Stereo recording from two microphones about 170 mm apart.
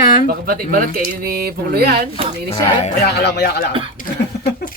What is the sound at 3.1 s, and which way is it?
Speech, 75° left (ahead or behind).